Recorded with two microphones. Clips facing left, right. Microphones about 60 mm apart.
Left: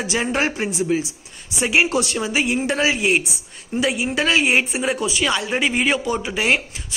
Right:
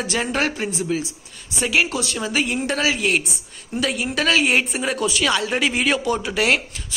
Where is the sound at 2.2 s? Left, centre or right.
Centre.